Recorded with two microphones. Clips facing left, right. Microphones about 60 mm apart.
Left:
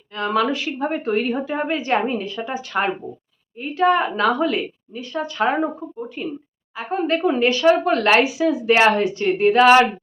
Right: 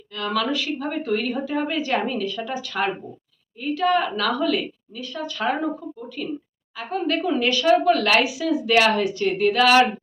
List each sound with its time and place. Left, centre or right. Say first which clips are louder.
0.1 s speech: left 4 dB; left